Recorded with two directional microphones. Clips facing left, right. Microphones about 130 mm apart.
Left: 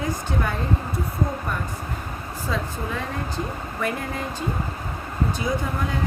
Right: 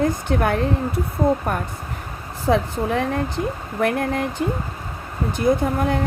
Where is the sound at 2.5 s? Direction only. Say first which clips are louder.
Right 9 dB; 65° right (ahead or behind).